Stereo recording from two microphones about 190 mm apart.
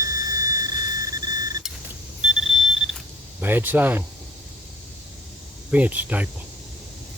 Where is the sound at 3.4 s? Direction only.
10° right (ahead or behind).